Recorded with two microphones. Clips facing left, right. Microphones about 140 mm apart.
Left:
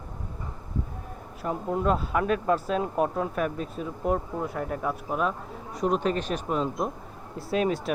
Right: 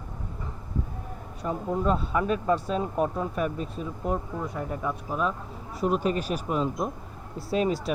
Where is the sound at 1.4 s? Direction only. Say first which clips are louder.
Even; 5° left (ahead or behind).